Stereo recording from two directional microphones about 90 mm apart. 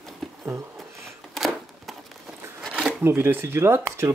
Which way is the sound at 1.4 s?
Centre (ahead or behind).